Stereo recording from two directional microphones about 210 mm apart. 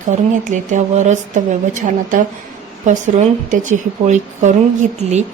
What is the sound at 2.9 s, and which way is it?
Speech, 35° right (ahead or behind).